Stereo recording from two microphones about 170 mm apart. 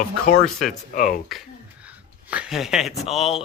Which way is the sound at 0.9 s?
50° left (ahead or behind).